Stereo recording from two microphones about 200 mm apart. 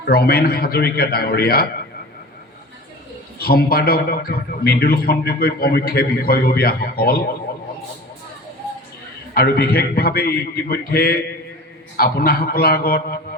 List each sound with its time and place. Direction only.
0.0 s a man's voice: 50° left (ahead or behind)
3.3 s a man's voice: 50° left (ahead or behind)
9.3 s a man's voice: 50° left (ahead or behind)